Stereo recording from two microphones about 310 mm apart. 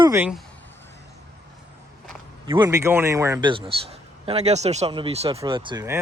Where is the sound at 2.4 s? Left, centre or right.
Centre.